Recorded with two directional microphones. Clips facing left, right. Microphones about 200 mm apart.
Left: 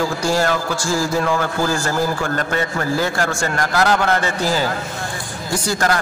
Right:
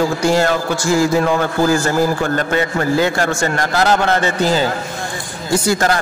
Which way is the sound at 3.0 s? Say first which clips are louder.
Right 4 dB; 20° right (ahead or behind).